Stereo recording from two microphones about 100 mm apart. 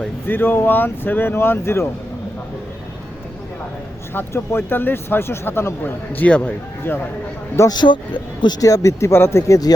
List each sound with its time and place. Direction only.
0.3 s speech: 20° left (ahead or behind)
4.1 s speech: 20° left (ahead or behind)
7.7 s a man's voice: 50° left (ahead or behind)
8.6 s speech: 35° left (ahead or behind)